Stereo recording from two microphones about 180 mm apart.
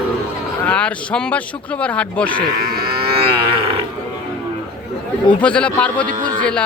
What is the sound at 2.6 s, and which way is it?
Livestock, 60° right (ahead or behind).